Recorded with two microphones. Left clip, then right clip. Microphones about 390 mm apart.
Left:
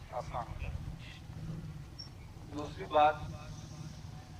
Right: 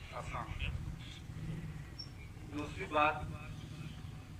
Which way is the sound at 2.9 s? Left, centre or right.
Left.